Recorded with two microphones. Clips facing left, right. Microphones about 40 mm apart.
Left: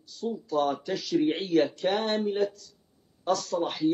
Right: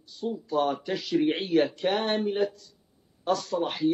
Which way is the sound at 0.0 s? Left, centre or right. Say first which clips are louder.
Even; right.